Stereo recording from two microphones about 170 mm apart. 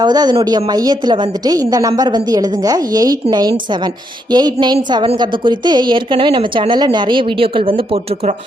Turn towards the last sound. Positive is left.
turn(degrees=-30)  # may be behind; listen again after turning